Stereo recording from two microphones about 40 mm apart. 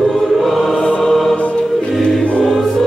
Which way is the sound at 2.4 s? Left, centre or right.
Centre.